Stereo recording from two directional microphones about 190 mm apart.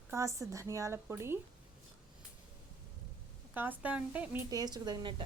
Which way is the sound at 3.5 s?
10° right (ahead or behind).